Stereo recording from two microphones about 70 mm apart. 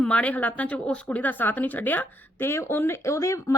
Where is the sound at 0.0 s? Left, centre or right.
Centre.